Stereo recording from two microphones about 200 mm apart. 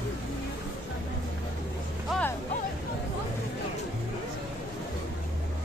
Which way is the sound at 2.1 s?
5° left (ahead or behind).